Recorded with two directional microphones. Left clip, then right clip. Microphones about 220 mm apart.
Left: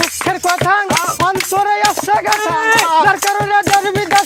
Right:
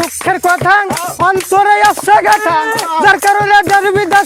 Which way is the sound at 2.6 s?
20° left (ahead or behind).